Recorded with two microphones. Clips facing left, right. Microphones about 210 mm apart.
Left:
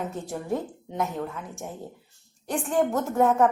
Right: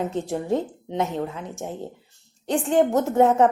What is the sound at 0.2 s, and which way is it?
A woman's voice, 25° right (ahead or behind).